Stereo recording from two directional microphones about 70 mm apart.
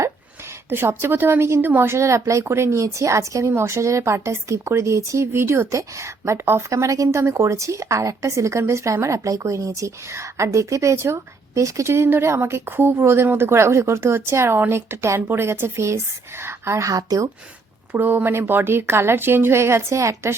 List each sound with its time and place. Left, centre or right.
0.7 s speech: right
2.0 s speech: right
17.9 s speech: right